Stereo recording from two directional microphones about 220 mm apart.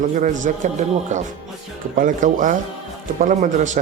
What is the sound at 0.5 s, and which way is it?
Speech, 35° right (ahead or behind).